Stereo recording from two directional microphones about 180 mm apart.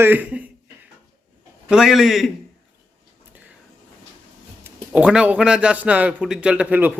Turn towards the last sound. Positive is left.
turn(degrees=-10)  # may be behind; listen again after turning